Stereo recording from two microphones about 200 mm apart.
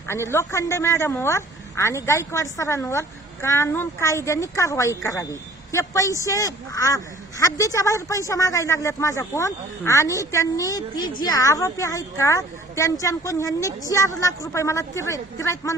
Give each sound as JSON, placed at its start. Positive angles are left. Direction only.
{"t": 0.1, "sound": "a woman's voice", "side_deg": 15}